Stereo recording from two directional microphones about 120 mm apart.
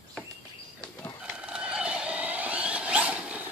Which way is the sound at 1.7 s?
10° right (ahead or behind).